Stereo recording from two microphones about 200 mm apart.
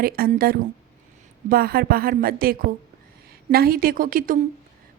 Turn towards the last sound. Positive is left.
turn(degrees=-45)  # may be behind; listen again after turning